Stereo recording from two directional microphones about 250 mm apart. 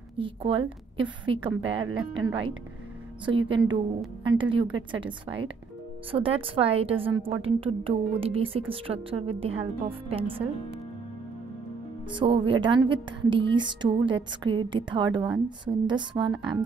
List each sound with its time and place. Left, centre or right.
0.2 s a woman's voice: right
12.1 s a woman's voice: centre